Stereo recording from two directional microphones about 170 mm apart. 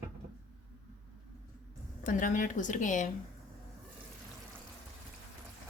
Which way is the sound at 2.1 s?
50° left (ahead or behind).